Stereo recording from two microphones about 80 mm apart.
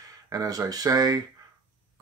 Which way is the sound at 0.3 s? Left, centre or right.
Right.